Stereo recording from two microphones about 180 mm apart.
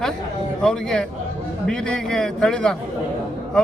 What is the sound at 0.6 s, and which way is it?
Speech, 5° left (ahead or behind).